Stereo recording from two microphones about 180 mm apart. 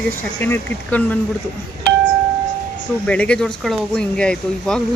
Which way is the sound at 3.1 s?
5° left (ahead or behind).